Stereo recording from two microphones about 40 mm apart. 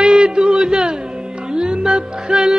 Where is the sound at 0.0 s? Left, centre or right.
Right.